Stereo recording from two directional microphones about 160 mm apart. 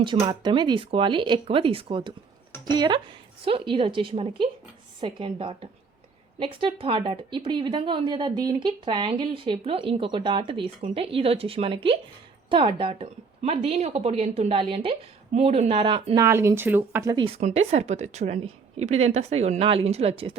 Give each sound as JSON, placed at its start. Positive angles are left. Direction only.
{"t": 0.0, "sound": "a woman's voice", "side_deg": -30}
{"t": 16.1, "sound": "speech", "side_deg": -15}
{"t": 17.2, "sound": "a woman's voice", "side_deg": -35}